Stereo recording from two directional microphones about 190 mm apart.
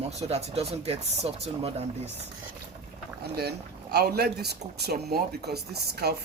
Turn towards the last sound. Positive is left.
turn(degrees=-55)  # may be behind; listen again after turning